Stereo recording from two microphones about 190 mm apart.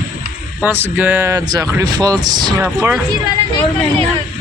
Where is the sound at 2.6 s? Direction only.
10° right (ahead or behind).